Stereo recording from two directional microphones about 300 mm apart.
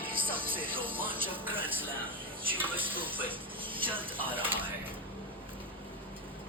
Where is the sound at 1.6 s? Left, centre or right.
Centre.